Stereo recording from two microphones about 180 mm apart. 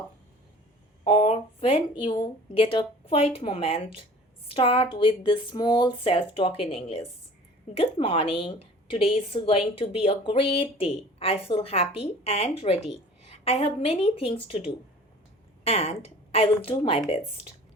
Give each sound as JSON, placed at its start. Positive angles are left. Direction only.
{"t": 1.0, "sound": "a sound", "side_deg": 35}
{"t": 2.0, "sound": "a woman's voice", "side_deg": 25}
{"t": 15.6, "sound": "a woman's voice", "side_deg": 35}